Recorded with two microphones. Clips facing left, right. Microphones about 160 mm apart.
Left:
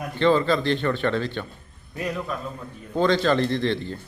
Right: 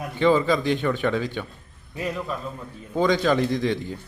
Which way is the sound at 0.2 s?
10° right (ahead or behind).